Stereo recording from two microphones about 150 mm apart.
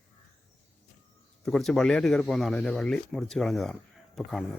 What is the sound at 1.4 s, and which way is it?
Speech, centre (ahead or behind).